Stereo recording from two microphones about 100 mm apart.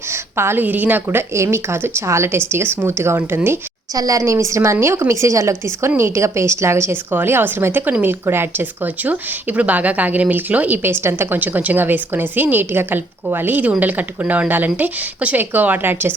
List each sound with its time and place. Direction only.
0.1 s a woman's voice: 25° right (ahead or behind)
3.9 s a woman's voice: 35° right (ahead or behind); by 16.1 s 20° right (ahead or behind)